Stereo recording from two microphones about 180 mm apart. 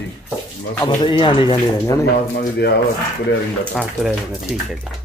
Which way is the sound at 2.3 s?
65° left (ahead or behind).